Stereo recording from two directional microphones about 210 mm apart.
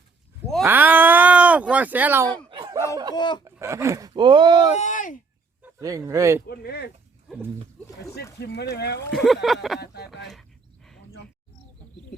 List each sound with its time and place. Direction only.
0.6 s a sound: 10° right (ahead or behind)
2.3 s a sound: 25° right (ahead or behind)
3.2 s speech: 20° left (ahead or behind)
3.4 s speech: 15° right (ahead or behind)
4.7 s a sound: 35° left (ahead or behind)
5.6 s a sound: 15° right (ahead or behind)
6.1 s speech: 15° right (ahead or behind)
6.5 s speech: 50° left (ahead or behind)
7.3 s roaring cats: centre (ahead or behind)
8.4 s speech: 55° left (ahead or behind)
9.0 s speech: centre (ahead or behind)
9.8 s speech: 50° left (ahead or behind)